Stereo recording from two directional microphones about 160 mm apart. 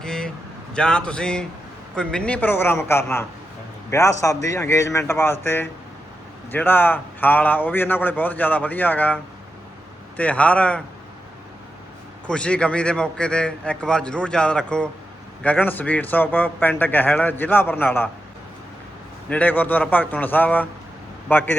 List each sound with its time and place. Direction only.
0.0 s a sound: 5° left (ahead or behind)
0.7 s a man's voice: 5° left (ahead or behind)
12.3 s a man's voice: 5° left (ahead or behind)
19.3 s a man's voice: 10° left (ahead or behind)